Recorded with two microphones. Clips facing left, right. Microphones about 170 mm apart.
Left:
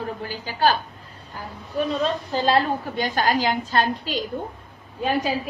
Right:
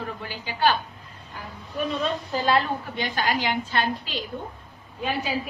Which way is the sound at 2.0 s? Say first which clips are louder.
Left 3 dB; 40° left (ahead or behind).